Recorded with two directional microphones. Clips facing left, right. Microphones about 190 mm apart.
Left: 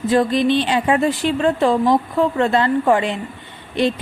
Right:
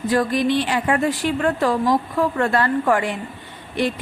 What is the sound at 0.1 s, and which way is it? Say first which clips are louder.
A woman's voice: left 3 dB; 25° left (ahead or behind).